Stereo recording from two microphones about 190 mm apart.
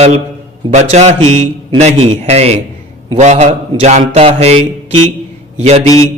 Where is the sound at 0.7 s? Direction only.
35° right (ahead or behind).